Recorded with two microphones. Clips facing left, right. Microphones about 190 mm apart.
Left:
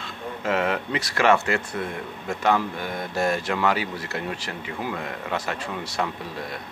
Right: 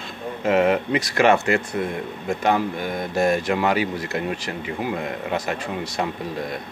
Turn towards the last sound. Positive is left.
turn(degrees=-15)  # may be behind; listen again after turning